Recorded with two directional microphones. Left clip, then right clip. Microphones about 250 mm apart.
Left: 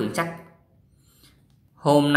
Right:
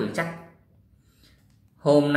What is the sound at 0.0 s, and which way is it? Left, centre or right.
Music, centre.